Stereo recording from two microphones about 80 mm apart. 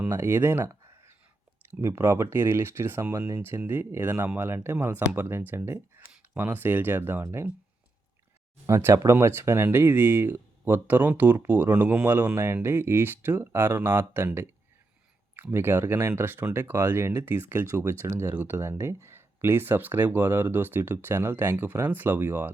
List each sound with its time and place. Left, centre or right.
0.0 s a sound: right
1.8 s speech: right
8.6 s speech: right